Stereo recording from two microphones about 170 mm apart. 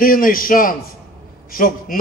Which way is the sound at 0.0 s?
55° left (ahead or behind).